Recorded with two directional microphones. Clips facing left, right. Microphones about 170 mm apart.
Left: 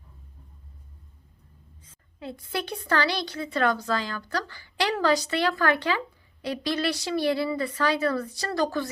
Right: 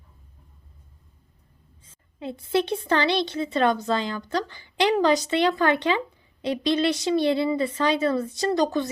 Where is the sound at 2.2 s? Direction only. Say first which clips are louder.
Right 8 dB; 25° right (ahead or behind).